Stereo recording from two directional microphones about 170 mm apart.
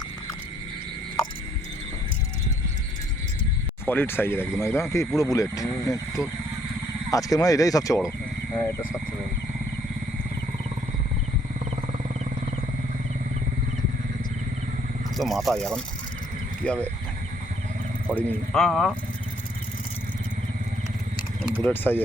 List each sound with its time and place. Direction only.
3.8 s speech: 10° left (ahead or behind)
15.1 s speech: centre (ahead or behind)
18.1 s speech: 10° left (ahead or behind)
21.6 s speech: 10° left (ahead or behind)